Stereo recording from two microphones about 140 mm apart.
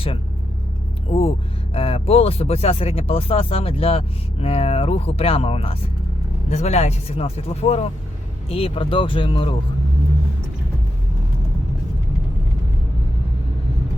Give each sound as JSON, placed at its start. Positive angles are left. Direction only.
{"t": 1.1, "sound": "speech", "side_deg": 45}